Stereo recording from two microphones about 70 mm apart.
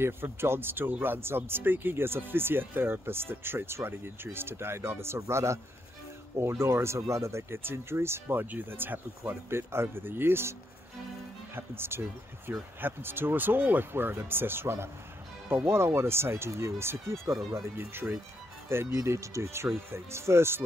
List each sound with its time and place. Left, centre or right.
0.0 s speech: right
11.5 s speech: right
17.7 s speech: right
18.9 s speech: right